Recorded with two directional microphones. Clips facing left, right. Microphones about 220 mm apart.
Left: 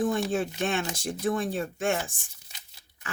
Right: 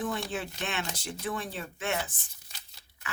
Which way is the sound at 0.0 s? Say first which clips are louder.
Left 7 dB; 45° left (ahead or behind).